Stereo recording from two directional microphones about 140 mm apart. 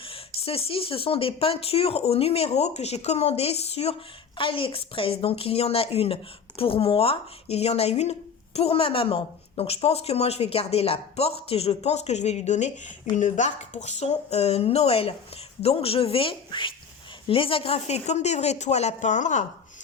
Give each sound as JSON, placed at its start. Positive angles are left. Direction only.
{"t": 0.0, "sound": "speech", "side_deg": 40}